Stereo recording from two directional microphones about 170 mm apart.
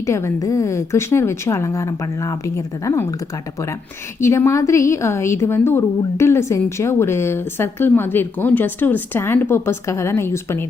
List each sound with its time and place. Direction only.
0.0 s a woman's voice: 15° left (ahead or behind)
4.2 s a woman's voice: 15° left (ahead or behind)